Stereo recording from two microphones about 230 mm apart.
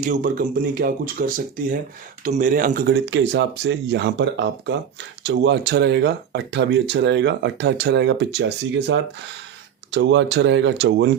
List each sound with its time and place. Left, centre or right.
0.0 s speech: right